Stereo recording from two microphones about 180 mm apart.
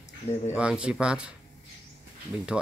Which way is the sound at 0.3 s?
35° left (ahead or behind).